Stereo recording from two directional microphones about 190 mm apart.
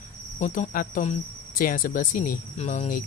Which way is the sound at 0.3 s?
40° left (ahead or behind).